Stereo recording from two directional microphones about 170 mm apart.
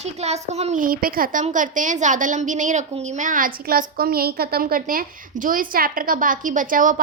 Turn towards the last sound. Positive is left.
turn(degrees=-50)  # may be behind; listen again after turning